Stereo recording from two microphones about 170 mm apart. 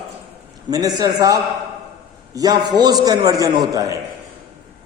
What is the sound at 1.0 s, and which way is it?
A man's voice, 20° right (ahead or behind).